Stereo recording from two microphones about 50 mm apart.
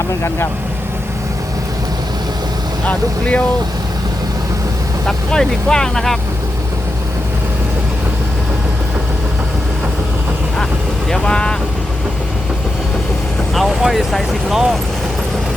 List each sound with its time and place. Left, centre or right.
2.8 s speech: left
5.0 s speech: centre
11.1 s speech: centre
13.5 s speech: centre